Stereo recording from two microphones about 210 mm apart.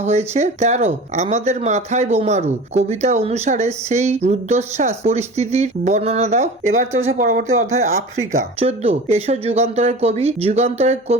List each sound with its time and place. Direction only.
0.0 s speech: 30° right (ahead or behind)